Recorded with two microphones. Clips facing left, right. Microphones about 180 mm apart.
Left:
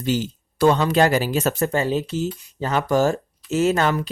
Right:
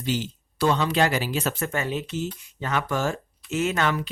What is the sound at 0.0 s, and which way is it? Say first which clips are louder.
Speech: left 5 dB; 45° left (ahead or behind).